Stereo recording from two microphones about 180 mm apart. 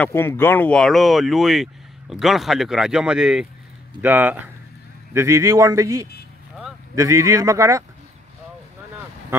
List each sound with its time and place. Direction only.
0.0 s speech: 15° left (ahead or behind); by 7.8 s 15° right (ahead or behind)